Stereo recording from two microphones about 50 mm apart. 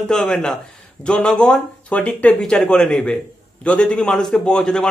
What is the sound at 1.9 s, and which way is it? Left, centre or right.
A man's voice, left.